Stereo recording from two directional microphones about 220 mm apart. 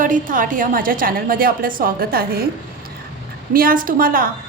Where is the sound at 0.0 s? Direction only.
35° right (ahead or behind).